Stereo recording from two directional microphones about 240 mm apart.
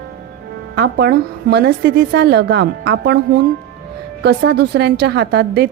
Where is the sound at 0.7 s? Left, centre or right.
Right.